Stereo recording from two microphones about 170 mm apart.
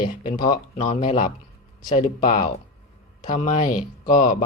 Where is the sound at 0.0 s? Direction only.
60° left (ahead or behind).